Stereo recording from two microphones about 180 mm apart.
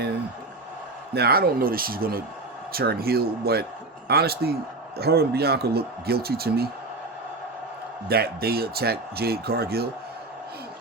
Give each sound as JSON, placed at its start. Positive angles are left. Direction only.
{"t": 1.1, "sound": "speech", "side_deg": -60}
{"t": 8.0, "sound": "speech", "side_deg": -60}